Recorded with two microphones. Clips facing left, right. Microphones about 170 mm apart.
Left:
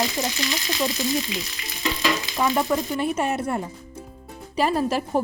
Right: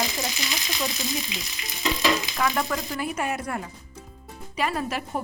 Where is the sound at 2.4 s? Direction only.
20° left (ahead or behind).